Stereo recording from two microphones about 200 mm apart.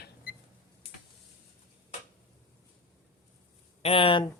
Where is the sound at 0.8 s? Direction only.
30° left (ahead or behind).